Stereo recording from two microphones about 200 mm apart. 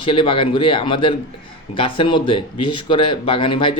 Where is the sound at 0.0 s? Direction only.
25° left (ahead or behind).